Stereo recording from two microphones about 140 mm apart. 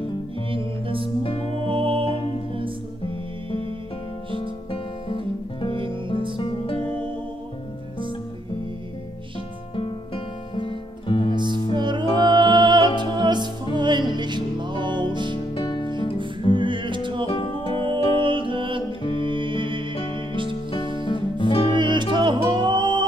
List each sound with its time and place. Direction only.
0.5 s music: 40° right (ahead or behind)
4.4 s music: 40° left (ahead or behind)
5.7 s music: 35° right (ahead or behind)
6.3 s music: 40° left (ahead or behind)
9.8 s music: 35° left (ahead or behind)
11.3 s music: 35° right (ahead or behind)
15.5 s music: 30° left (ahead or behind)
16.5 s music: 35° right (ahead or behind)
17.3 s music: 35° left (ahead or behind)
17.7 s music: 35° right (ahead or behind)
21.0 s music: 35° left (ahead or behind)
21.7 s music: 35° right (ahead or behind)